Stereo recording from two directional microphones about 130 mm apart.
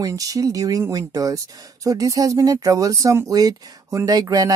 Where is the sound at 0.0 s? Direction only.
25° right (ahead or behind).